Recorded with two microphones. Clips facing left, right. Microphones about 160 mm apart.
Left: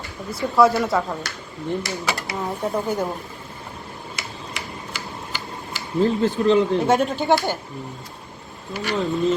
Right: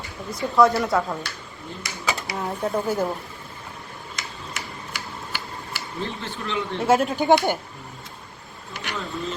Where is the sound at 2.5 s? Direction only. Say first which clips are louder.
Even; centre (ahead or behind).